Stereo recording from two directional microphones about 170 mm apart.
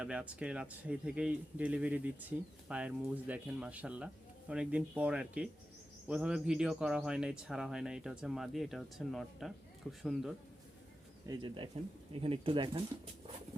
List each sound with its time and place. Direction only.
0.0 s speech: 5° right (ahead or behind)
11.3 s speech: 30° right (ahead or behind)